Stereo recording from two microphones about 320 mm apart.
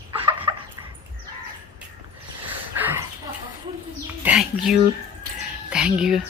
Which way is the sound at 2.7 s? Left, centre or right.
Centre.